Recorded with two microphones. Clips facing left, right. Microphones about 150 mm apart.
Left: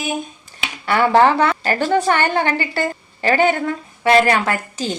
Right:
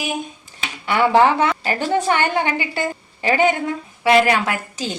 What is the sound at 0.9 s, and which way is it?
A woman's voice, 15° right (ahead or behind).